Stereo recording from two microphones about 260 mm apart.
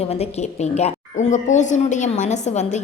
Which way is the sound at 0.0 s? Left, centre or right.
Left.